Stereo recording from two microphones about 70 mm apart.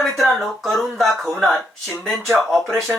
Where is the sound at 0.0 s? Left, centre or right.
Centre.